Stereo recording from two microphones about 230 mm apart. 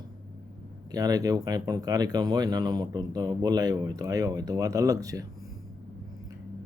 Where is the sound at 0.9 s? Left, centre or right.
Centre.